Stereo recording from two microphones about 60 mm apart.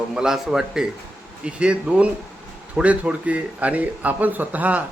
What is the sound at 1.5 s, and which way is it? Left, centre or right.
A man's voice, centre.